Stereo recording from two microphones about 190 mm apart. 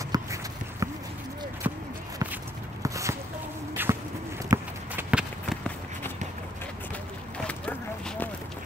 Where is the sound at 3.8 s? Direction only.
10° right (ahead or behind).